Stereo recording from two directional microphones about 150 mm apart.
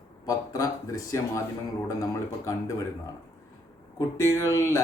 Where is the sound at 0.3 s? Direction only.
20° left (ahead or behind).